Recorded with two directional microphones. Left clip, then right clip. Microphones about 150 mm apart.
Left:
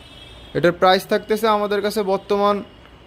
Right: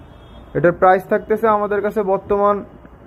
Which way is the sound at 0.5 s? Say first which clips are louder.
Right 2 dB; 30° left (ahead or behind).